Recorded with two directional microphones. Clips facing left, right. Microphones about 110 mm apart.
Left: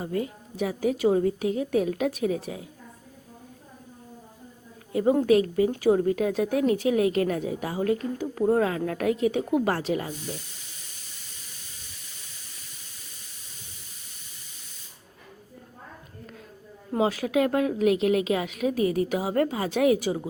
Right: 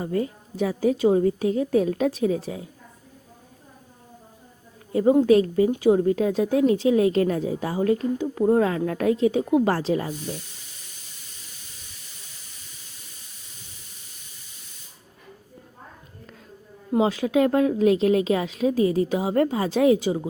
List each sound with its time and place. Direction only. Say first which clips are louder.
0.0 s a woman's voice: right 3 dB; 35° right (ahead or behind)
5.2 s a woman's voice: right 3 dB; 30° right (ahead or behind)
5.7 s a woman's voice: right 3 dB; 20° right (ahead or behind)
16.9 s a woman's voice: right 3 dB; 25° right (ahead or behind)